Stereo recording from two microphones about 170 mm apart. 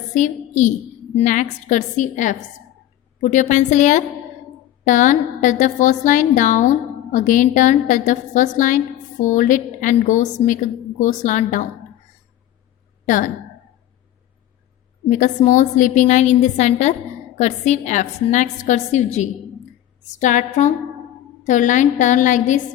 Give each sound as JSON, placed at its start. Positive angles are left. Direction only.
{"t": 0.1, "sound": "a child's voice", "side_deg": 45}
{"t": 13.1, "sound": "a woman's voice", "side_deg": 50}
{"t": 15.1, "sound": "a woman's voice", "side_deg": 50}